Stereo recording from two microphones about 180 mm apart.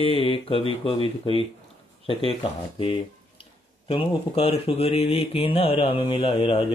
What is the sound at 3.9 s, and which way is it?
Speech, 30° left (ahead or behind).